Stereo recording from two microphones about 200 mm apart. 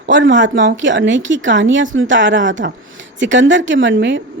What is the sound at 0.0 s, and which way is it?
A woman's voice, 65° right (ahead or behind).